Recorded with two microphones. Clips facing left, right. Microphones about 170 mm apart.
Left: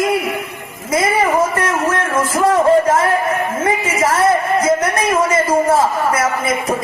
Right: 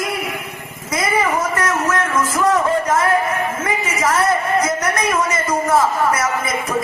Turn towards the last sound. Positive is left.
turn(degrees=30)  # may be behind; listen again after turning